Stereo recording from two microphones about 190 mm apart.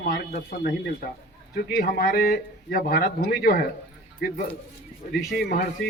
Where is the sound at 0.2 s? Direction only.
50° left (ahead or behind).